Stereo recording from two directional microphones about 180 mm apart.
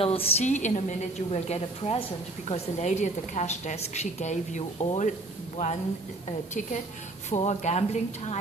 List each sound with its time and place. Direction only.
0.0 s a woman's voice: 35° left (ahead or behind)
6.5 s a woman's voice: 45° left (ahead or behind)